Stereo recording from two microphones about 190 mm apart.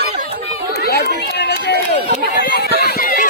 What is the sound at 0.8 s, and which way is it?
Run, 55° left (ahead or behind).